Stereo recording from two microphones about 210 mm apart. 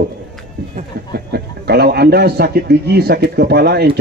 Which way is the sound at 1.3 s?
50° right (ahead or behind).